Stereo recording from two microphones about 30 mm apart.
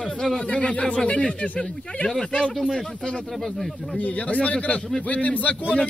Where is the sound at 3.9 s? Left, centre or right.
Left.